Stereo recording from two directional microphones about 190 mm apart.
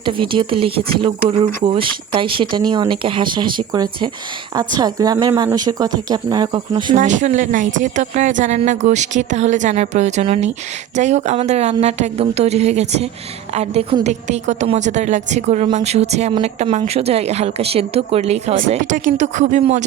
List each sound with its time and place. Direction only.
0.0 s speech: 25° right (ahead or behind)
6.9 s speech: 40° right (ahead or behind)